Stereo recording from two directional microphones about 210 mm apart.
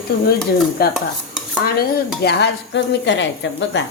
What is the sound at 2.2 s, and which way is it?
Speech, 55° left (ahead or behind).